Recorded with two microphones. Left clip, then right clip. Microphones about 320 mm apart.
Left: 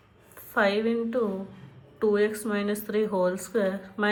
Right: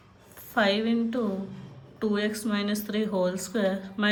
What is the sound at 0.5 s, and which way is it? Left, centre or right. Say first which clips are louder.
Speech: left 1 dB; centre.